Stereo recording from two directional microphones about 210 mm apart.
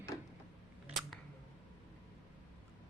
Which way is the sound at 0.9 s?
Centre (ahead or behind).